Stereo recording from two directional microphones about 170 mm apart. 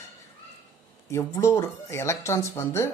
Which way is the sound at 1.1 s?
15° left (ahead or behind).